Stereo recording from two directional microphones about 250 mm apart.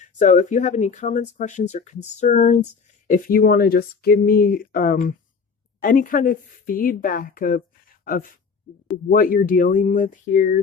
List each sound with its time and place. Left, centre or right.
0.0 s speech: left